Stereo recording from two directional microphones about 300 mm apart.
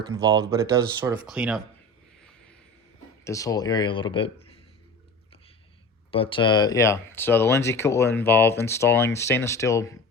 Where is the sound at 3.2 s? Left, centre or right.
Centre.